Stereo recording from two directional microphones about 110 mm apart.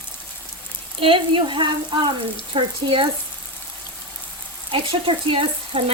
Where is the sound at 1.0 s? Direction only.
50° right (ahead or behind).